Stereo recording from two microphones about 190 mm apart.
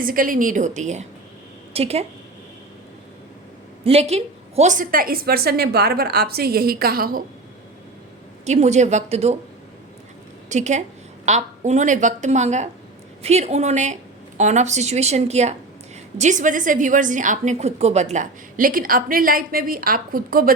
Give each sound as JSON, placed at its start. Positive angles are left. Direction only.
{"t": 0.0, "sound": "a woman's voice", "side_deg": -45}
{"t": 3.8, "sound": "a woman's voice", "side_deg": -35}
{"t": 8.4, "sound": "a woman's voice", "side_deg": -35}
{"t": 10.5, "sound": "a woman's voice", "side_deg": -40}